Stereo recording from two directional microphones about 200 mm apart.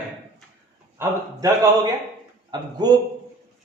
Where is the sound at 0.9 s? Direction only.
15° right (ahead or behind).